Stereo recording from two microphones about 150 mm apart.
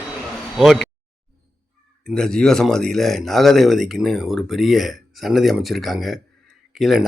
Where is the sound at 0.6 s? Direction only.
Centre (ahead or behind).